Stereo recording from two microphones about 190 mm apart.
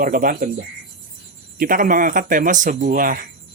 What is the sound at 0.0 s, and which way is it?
Speech, 50° right (ahead or behind).